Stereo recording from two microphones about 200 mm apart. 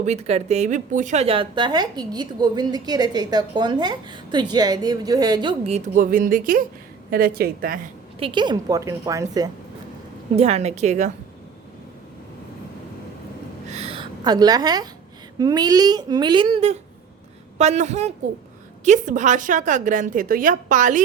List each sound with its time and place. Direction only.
0.0 s a woman's voice: 35° right (ahead or behind); by 7.8 s 50° right (ahead or behind)
8.2 s a woman's voice: 25° right (ahead or behind)
10.3 s a woman's voice: 30° right (ahead or behind)
13.7 s a sound: 30° right (ahead or behind)
15.4 s a woman's voice: 20° right (ahead or behind); by 21.0 s 40° right (ahead or behind)